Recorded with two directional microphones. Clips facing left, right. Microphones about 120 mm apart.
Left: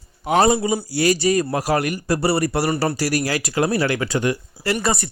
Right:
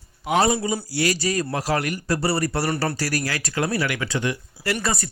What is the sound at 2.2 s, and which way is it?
Speech, 30° left (ahead or behind).